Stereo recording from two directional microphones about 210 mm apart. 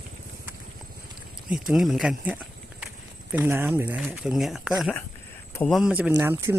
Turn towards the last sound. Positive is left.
turn(degrees=-10)  # may be behind; listen again after turning